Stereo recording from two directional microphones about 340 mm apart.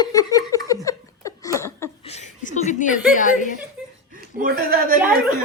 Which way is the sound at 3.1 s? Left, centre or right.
Left.